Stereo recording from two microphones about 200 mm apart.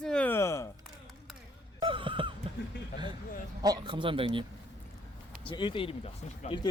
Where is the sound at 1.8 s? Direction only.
25° right (ahead or behind).